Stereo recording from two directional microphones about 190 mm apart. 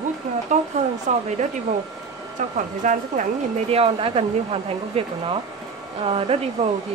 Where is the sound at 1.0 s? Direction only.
40° right (ahead or behind).